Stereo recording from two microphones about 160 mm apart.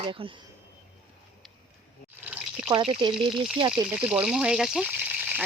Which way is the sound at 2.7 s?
35° right (ahead or behind).